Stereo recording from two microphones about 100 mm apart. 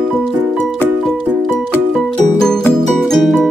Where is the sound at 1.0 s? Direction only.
Centre (ahead or behind).